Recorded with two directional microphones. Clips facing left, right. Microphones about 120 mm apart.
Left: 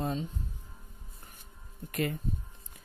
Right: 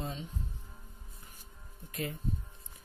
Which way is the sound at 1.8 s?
70° left (ahead or behind).